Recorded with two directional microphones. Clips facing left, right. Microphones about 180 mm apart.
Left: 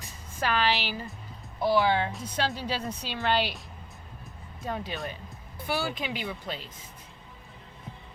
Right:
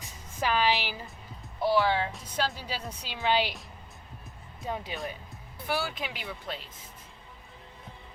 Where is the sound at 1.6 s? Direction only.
Centre (ahead or behind).